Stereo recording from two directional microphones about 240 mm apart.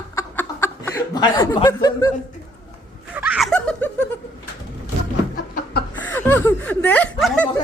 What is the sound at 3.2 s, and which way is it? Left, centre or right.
Giggle, centre.